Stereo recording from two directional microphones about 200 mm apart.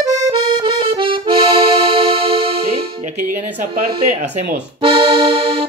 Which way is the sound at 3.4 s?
10° right (ahead or behind).